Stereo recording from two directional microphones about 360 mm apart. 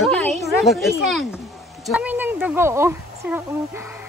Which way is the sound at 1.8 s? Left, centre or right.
Centre.